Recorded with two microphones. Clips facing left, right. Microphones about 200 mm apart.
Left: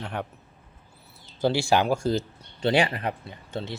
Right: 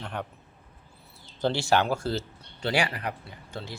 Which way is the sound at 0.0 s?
5° left (ahead or behind).